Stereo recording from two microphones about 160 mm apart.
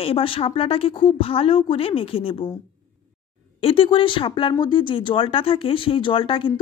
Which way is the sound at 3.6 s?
35° left (ahead or behind).